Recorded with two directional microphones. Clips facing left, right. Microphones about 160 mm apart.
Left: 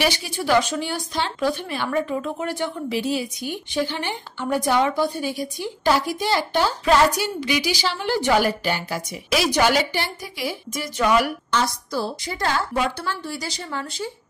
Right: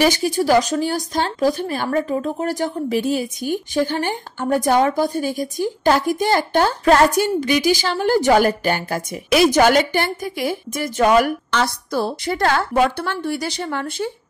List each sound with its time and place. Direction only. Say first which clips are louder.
0.0 s speech: right 7 dB; 45° right (ahead or behind)
11.5 s a woman's voice: right 2 dB; 60° right (ahead or behind)